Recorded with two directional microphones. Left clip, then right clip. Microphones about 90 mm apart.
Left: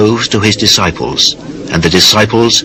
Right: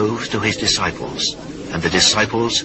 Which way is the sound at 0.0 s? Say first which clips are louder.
Left 9 dB; 15° left (ahead or behind).